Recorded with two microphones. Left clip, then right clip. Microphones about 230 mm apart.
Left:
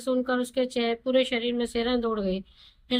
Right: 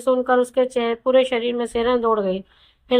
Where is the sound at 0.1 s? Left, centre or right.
Centre.